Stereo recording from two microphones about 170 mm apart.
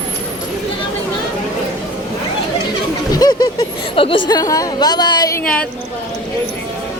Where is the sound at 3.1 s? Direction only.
20° left (ahead or behind).